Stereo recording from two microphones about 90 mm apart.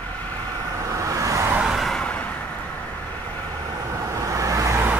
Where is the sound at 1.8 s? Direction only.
10° left (ahead or behind).